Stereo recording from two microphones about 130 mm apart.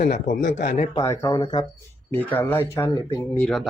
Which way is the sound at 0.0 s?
75° left (ahead or behind).